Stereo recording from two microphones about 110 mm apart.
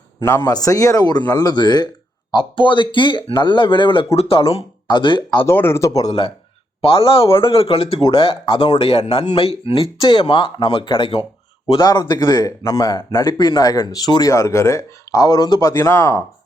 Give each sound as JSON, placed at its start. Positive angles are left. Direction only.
{"t": 0.2, "sound": "speech", "side_deg": 25}
{"t": 1.5, "sound": "speech", "side_deg": 40}
{"t": 4.9, "sound": "speech", "side_deg": 45}
{"t": 5.5, "sound": "speech", "side_deg": 20}
{"t": 6.8, "sound": "speech", "side_deg": 60}
{"t": 8.1, "sound": "speech", "side_deg": 50}
{"t": 10.0, "sound": "speech", "side_deg": 45}
{"t": 15.7, "sound": "speech", "side_deg": 20}